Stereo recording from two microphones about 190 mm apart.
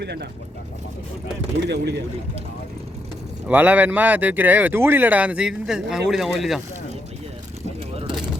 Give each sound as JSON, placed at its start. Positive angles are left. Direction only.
{"t": 0.0, "sound": "speech", "side_deg": -60}
{"t": 1.6, "sound": "speech", "side_deg": -60}
{"t": 3.4, "sound": "speech", "side_deg": -10}